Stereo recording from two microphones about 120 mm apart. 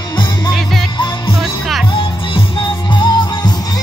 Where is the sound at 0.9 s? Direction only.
40° left (ahead or behind).